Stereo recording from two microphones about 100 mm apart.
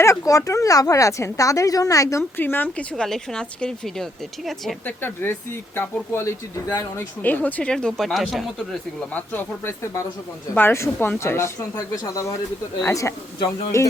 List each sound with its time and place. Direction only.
0.0 s speech: 30° left (ahead or behind)
2.4 s speech: 20° left (ahead or behind)
2.9 s speech: 5° left (ahead or behind)
4.9 s speech: 20° left (ahead or behind)
7.2 s speech: 15° left (ahead or behind)
9.1 s speech: 20° left (ahead or behind)